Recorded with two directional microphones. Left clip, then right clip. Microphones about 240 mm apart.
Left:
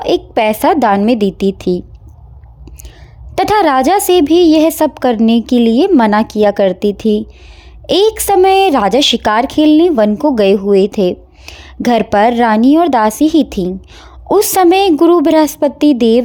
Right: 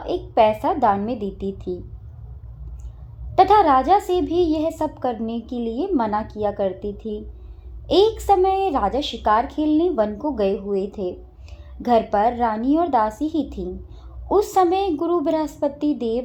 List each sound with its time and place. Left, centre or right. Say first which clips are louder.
0.0 s a woman's voice: left 6 dB; left
3.3 s a woman's voice: left 4 dB; left